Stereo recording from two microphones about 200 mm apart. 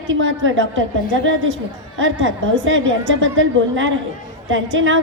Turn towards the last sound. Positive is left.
turn(degrees=-70)  # may be behind; listen again after turning